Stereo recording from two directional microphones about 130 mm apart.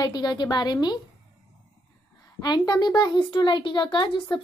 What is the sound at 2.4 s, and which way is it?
A woman's voice, 30° left (ahead or behind).